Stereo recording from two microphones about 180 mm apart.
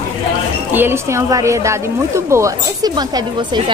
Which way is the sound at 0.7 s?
10° right (ahead or behind).